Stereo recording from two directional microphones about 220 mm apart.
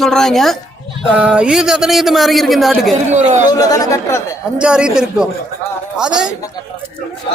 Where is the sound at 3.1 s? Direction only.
30° right (ahead or behind).